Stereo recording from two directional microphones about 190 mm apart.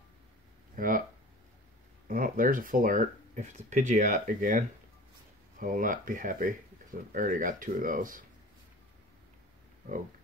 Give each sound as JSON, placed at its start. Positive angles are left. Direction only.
{"t": 0.7, "sound": "speech", "side_deg": -45}
{"t": 2.0, "sound": "speech", "side_deg": -45}